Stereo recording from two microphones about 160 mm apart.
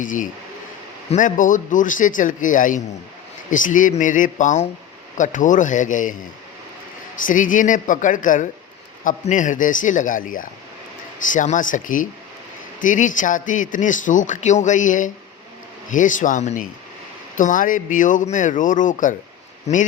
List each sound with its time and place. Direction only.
0.0 s a man's voice: 55° left (ahead or behind)
7.3 s a man's voice: 55° left (ahead or behind)